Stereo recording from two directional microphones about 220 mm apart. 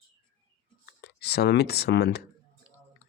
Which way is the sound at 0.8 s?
50° left (ahead or behind).